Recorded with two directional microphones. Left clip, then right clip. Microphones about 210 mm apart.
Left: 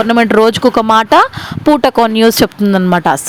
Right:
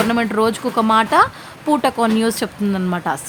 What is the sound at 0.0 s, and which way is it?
A woman's voice, 35° left (ahead or behind).